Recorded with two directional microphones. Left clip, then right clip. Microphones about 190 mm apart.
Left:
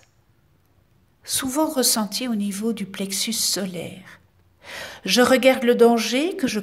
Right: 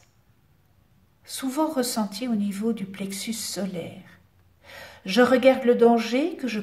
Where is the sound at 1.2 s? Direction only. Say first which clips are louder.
Left 3 dB; 35° left (ahead or behind).